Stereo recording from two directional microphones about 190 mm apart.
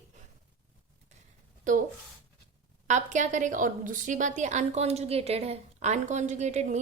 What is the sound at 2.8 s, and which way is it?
A woman's voice, 40° right (ahead or behind).